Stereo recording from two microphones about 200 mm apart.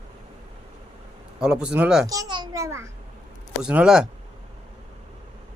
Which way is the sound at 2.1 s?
20° right (ahead or behind).